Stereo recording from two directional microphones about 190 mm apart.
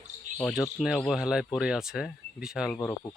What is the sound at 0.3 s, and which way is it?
Speech, centre (ahead or behind).